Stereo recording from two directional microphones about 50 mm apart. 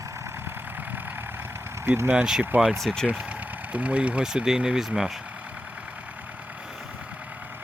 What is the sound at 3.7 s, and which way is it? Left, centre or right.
Speech, right.